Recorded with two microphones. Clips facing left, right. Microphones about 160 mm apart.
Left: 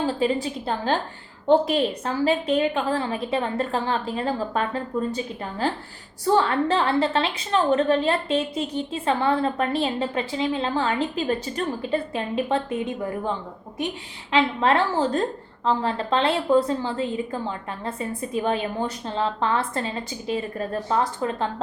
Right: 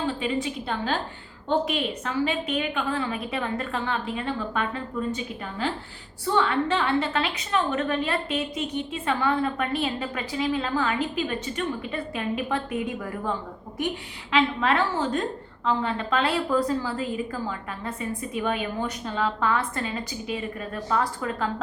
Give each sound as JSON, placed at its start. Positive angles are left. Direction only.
{"t": 0.0, "sound": "a woman's voice", "side_deg": 35}